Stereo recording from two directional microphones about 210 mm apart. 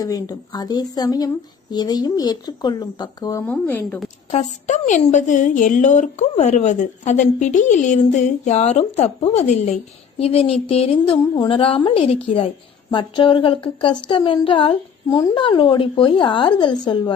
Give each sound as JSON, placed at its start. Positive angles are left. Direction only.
{"t": 0.0, "sound": "a woman's voice", "side_deg": 15}
{"t": 3.4, "sound": "speech", "side_deg": 10}
{"t": 4.6, "sound": "a woman's voice", "side_deg": 35}